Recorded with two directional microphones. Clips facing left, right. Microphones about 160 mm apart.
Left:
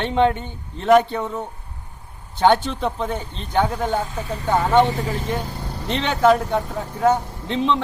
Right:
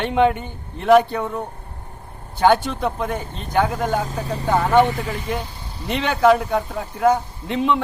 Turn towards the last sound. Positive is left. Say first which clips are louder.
# right 1 dB
turn(degrees=-10)  # may be behind; listen again after turning